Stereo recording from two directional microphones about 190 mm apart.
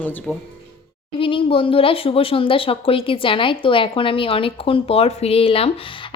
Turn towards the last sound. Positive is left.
turn(degrees=30)  # may be behind; listen again after turning